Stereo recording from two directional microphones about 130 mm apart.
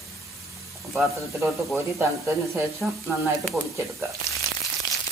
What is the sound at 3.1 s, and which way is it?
Speech, 25° right (ahead or behind).